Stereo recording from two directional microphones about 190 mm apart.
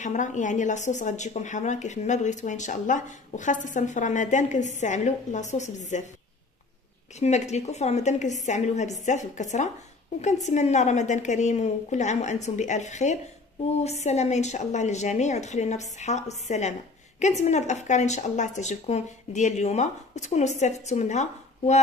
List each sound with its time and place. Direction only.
0.0 s a woman's voice: 40° left (ahead or behind)
7.2 s a woman's voice: 35° left (ahead or behind)